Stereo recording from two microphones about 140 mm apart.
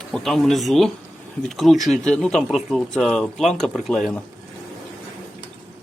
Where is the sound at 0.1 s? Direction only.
Centre (ahead or behind).